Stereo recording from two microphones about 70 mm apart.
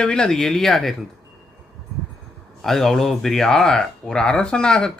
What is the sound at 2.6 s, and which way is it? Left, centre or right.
Speech, centre.